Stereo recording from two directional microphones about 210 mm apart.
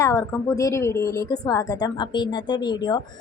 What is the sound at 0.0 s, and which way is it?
A woman's voice, 15° left (ahead or behind).